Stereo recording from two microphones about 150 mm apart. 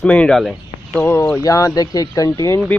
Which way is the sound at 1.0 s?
15° left (ahead or behind).